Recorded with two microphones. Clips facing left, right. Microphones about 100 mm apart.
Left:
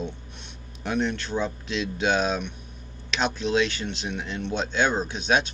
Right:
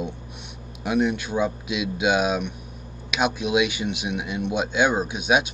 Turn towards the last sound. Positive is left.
turn(degrees=-10)  # may be behind; listen again after turning